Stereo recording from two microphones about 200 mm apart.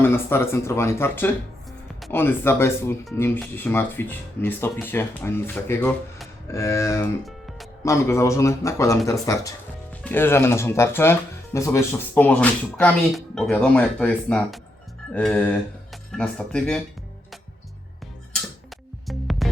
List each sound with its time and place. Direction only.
0.0 s speech: 10° left (ahead or behind)
7.3 s music: centre (ahead or behind)
7.9 s speech: 15° left (ahead or behind)
19.0 s music: centre (ahead or behind)